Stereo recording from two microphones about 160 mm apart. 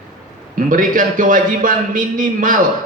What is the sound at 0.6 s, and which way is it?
A man's voice, 55° right (ahead or behind).